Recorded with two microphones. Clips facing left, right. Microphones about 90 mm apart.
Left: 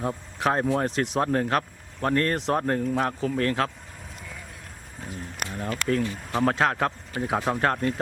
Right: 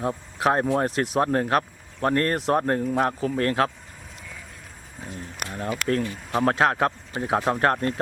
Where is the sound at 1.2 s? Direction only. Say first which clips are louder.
Right 3 dB; 25° right (ahead or behind).